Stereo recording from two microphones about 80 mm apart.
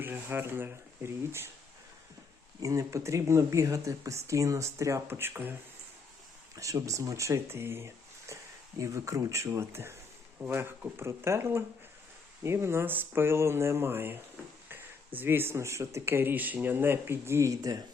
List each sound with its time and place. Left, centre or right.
0.0 s speech: right
2.6 s speech: right
6.6 s speech: right
15.2 s speech: right